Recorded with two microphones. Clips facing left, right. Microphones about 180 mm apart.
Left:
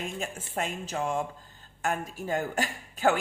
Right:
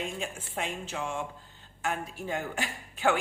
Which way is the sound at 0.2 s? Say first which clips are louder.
Left 2 dB; 45° left (ahead or behind).